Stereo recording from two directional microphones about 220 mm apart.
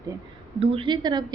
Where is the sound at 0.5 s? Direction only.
25° right (ahead or behind).